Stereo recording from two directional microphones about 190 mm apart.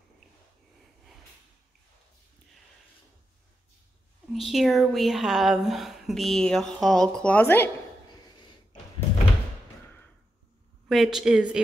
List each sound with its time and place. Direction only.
4.3 s a woman's voice: centre (ahead or behind)
8.1 s a sound: 25° left (ahead or behind)
10.9 s a woman's voice: centre (ahead or behind)